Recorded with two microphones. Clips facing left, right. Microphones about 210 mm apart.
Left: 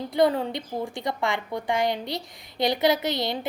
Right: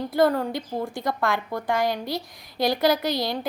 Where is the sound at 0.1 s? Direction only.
Centre (ahead or behind).